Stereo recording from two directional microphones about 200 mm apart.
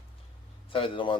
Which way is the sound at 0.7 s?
25° left (ahead or behind).